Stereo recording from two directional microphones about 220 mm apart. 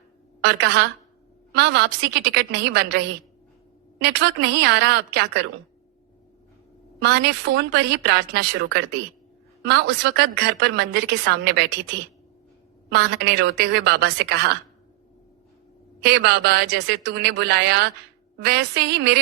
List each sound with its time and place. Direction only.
0.4 s a woman's voice: 50° right (ahead or behind)
7.0 s a woman's voice: 50° right (ahead or behind)
16.0 s a woman's voice: 50° right (ahead or behind)